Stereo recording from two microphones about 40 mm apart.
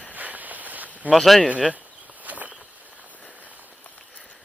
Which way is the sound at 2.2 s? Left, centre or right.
Right.